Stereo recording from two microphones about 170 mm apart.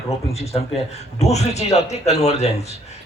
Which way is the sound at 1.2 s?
40° left (ahead or behind).